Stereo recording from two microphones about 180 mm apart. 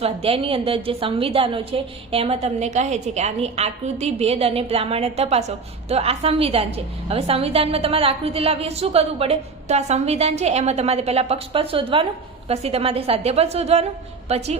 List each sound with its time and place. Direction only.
0.0 s a woman's voice: 30° right (ahead or behind)